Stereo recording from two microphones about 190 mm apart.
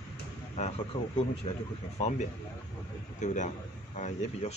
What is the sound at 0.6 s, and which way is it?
A man's voice, 35° left (ahead or behind).